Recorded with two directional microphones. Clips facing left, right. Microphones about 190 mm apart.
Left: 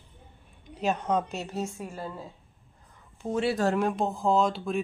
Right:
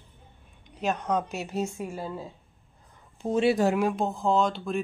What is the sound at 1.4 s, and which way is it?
Speech, 15° right (ahead or behind).